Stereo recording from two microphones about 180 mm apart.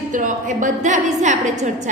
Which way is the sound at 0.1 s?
45° right (ahead or behind).